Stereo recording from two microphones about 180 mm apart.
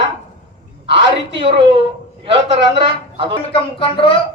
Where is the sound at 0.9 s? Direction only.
30° right (ahead or behind).